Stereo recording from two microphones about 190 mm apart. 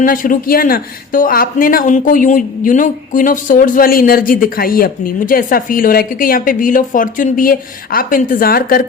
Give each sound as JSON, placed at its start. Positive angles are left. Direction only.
{"t": 0.0, "sound": "speech", "side_deg": 45}